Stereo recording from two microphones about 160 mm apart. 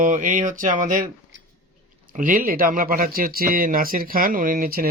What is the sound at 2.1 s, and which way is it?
Speech, 55° right (ahead or behind).